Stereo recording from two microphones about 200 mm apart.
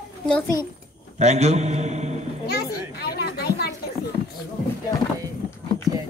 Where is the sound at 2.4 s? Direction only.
50° left (ahead or behind).